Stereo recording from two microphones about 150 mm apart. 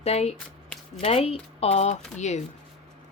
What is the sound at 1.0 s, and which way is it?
Speech, 40° left (ahead or behind).